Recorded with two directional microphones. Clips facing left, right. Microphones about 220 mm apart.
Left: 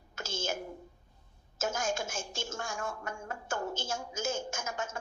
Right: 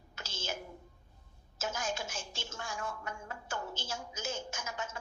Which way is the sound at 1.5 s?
45° left (ahead or behind).